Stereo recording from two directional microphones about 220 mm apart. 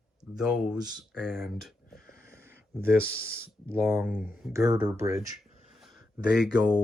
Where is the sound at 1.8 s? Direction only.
45° left (ahead or behind).